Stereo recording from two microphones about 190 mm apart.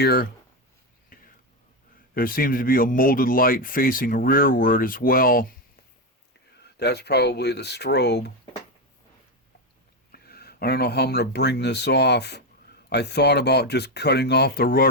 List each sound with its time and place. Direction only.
0.0 s speech: 55° left (ahead or behind)
1.1 s whispering: 50° left (ahead or behind)
2.1 s speech: 50° left (ahead or behind)
6.7 s speech: 60° left (ahead or behind)
10.1 s speech: 55° left (ahead or behind)